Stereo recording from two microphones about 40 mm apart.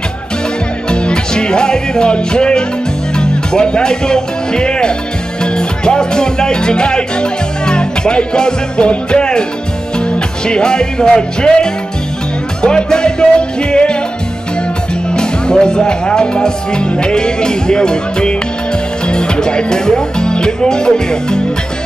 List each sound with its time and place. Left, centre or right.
0.8 s music: left
3.2 s speech: left
5.4 s music: left
12.6 s speech: left
15.1 s speech: left